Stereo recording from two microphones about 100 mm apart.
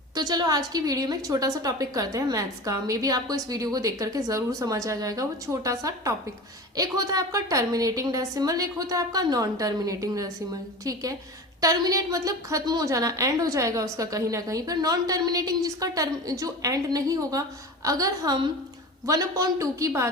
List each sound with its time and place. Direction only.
0.1 s a woman's voice: 40° right (ahead or behind)